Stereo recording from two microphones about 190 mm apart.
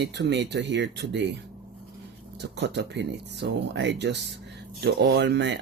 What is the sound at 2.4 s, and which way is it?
Speech, 65° right (ahead or behind).